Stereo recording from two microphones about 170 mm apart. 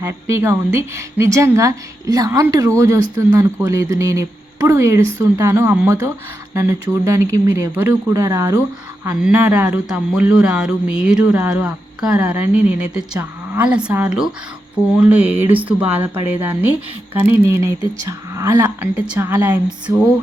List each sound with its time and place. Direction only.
0.0 s speech: 15° right (ahead or behind)
9.0 s speech: 10° right (ahead or behind)